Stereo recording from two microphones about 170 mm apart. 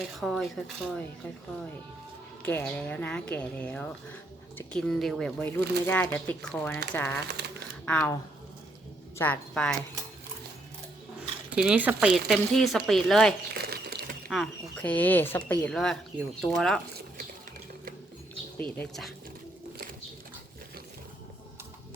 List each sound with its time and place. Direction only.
0.2 s speech: centre (ahead or behind)
2.4 s speech: 10° left (ahead or behind)
7.3 s speech: 75° right (ahead or behind)
7.9 s speech: 5° left (ahead or behind)
9.1 s speech: 10° left (ahead or behind)
11.5 s speech: 5° right (ahead or behind)
13.5 s crumpling: 70° right (ahead or behind)
14.3 s speech: 5° left (ahead or behind)
18.8 s speech: centre (ahead or behind)